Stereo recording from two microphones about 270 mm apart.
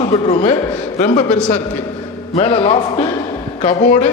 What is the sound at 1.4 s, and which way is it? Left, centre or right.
Speech, centre.